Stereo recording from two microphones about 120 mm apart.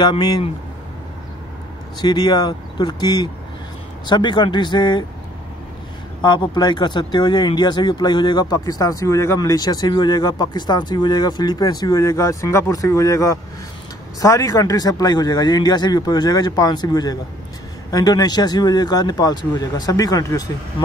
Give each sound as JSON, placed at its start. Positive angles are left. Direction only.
{"t": 0.0, "sound": "speech", "side_deg": 40}
{"t": 2.0, "sound": "speech", "side_deg": 35}
{"t": 6.2, "sound": "speech", "side_deg": 35}